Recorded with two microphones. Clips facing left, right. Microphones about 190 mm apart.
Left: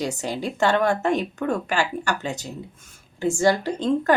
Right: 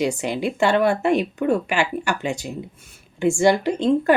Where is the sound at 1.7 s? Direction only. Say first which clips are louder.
Right 2 dB; 40° left (ahead or behind).